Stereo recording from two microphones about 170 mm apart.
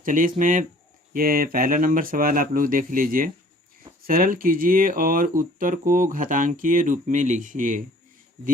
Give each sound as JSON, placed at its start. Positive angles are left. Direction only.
{"t": 0.0, "sound": "speech", "side_deg": -50}